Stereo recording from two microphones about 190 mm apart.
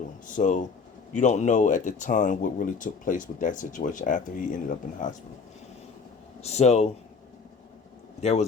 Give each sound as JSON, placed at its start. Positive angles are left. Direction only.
{"t": 0.3, "sound": "speech", "side_deg": 40}
{"t": 6.4, "sound": "speech", "side_deg": 35}
{"t": 8.2, "sound": "speech", "side_deg": 35}